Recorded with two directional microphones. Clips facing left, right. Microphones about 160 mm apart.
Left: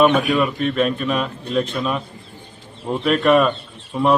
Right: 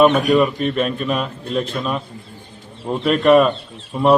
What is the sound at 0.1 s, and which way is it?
Speech, 40° right (ahead or behind).